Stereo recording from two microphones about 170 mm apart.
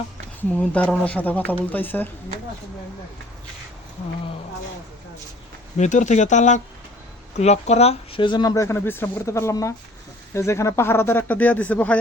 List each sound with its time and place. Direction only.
0.5 s speech: 10° left (ahead or behind)
5.7 s speech: 45° left (ahead or behind); by 11.9 s 10° left (ahead or behind)